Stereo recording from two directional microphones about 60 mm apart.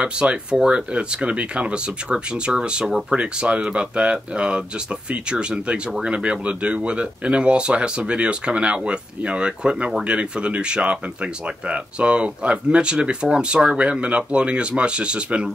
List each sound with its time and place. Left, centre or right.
0.0 s speech: centre